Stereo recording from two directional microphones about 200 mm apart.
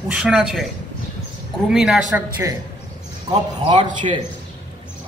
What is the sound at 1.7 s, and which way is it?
Speech, centre (ahead or behind).